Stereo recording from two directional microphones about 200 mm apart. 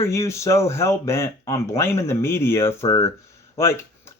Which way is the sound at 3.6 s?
10° left (ahead or behind).